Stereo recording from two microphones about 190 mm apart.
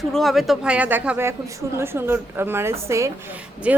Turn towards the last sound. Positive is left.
turn(degrees=-5)  # may be behind; listen again after turning